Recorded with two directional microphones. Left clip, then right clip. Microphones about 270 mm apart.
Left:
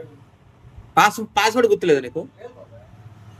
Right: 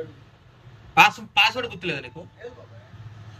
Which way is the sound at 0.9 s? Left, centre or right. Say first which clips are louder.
Even; left.